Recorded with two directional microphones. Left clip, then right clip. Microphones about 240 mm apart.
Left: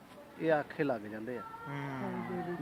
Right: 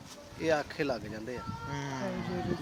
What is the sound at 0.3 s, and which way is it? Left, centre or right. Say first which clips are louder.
Speech: right 1 dB; centre.